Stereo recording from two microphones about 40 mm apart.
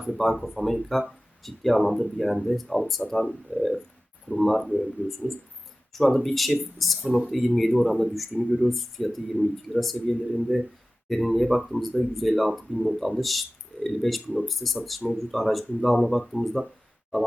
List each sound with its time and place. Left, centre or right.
0.1 s speech: centre
5.0 s speech: right
5.9 s speech: centre